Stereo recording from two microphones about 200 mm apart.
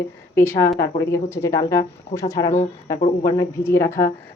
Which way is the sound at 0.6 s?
50° left (ahead or behind).